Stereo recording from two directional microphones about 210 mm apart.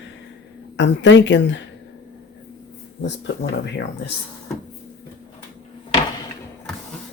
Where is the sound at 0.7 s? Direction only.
55° left (ahead or behind).